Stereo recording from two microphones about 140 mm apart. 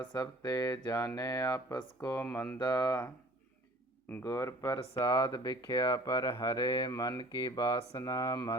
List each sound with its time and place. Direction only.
0.1 s speech: 25° left (ahead or behind)
2.6 s speech: 25° left (ahead or behind)
4.2 s speech: 20° left (ahead or behind)
4.8 s speech: 35° left (ahead or behind)